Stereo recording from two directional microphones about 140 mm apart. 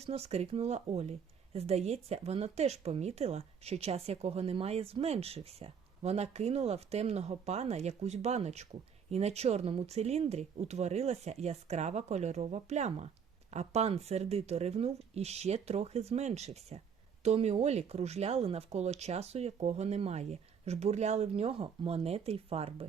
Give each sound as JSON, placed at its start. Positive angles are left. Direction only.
{"t": 0.0, "sound": "speech", "side_deg": -45}